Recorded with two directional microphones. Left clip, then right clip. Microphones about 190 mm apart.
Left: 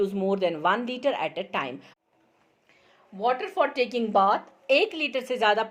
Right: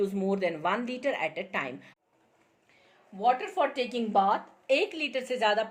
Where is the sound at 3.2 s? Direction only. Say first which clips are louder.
Left 1 dB; 45° left (ahead or behind).